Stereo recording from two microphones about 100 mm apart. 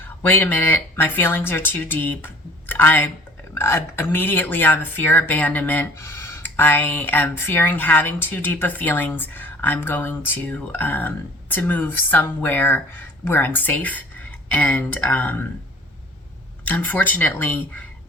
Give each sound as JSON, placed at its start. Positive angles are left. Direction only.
{"t": 0.0, "sound": "speech", "side_deg": 20}
{"t": 16.6, "sound": "speech", "side_deg": 15}